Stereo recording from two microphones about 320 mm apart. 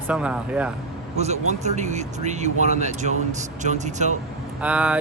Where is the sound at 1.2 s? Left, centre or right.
Right.